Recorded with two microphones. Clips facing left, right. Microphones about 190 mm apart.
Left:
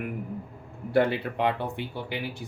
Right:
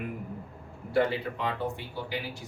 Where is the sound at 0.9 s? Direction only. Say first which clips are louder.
Left 3 dB; 65° left (ahead or behind).